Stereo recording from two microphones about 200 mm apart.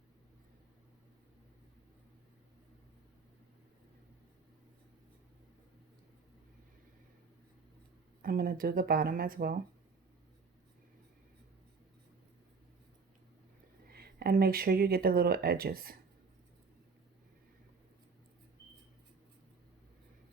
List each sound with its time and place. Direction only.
8.2 s speech: 45° right (ahead or behind)
13.9 s speech: 50° right (ahead or behind)